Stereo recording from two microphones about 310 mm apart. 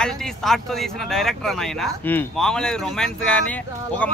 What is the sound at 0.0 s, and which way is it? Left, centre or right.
Speech, centre.